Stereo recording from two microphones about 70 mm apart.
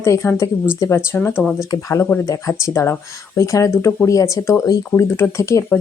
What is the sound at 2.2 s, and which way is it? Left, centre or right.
Speech, left.